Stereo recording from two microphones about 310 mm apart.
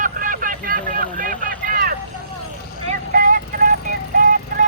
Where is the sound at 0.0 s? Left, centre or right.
Right.